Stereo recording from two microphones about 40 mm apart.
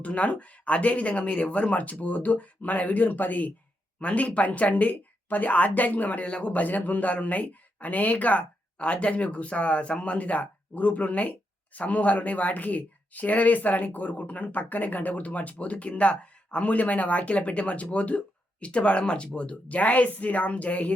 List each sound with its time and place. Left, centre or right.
0.0 s a woman's voice: left
6.3 s speech: left
6.6 s speech: left